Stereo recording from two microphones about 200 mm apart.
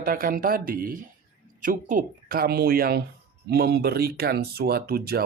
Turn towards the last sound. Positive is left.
turn(degrees=-50)  # may be behind; listen again after turning